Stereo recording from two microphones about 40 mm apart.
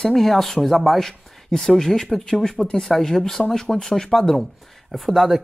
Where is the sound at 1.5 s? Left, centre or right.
Centre.